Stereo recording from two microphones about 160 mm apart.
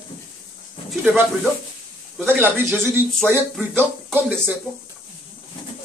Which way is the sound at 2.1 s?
10° right (ahead or behind).